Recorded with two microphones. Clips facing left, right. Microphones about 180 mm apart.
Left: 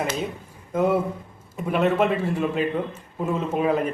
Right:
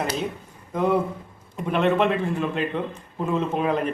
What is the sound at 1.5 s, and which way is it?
A man's voice, 5° left (ahead or behind).